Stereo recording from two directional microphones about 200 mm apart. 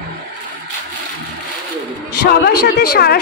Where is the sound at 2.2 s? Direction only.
50° left (ahead or behind).